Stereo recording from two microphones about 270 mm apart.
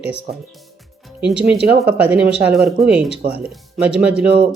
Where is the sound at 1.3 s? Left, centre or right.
Centre.